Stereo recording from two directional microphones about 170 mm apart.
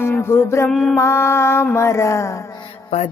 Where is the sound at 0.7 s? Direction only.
Centre (ahead or behind).